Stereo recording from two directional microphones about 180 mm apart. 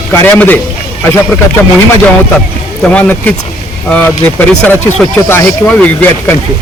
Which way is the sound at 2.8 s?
10° left (ahead or behind).